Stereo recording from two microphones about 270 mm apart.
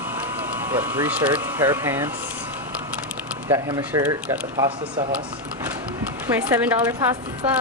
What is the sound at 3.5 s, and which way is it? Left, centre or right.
Speech, centre.